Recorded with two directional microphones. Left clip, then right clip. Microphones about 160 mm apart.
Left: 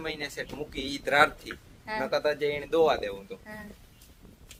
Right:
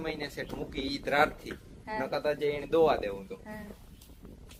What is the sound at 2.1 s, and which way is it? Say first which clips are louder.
A man's voice: left 3 dB; centre (ahead or behind).